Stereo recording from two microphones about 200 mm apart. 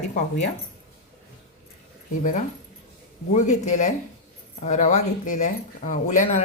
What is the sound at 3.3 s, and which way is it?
Speech, 35° left (ahead or behind).